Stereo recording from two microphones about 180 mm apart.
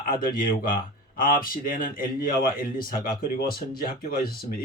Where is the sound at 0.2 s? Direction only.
50° left (ahead or behind).